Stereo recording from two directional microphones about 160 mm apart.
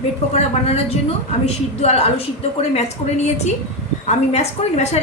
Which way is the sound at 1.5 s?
45° left (ahead or behind).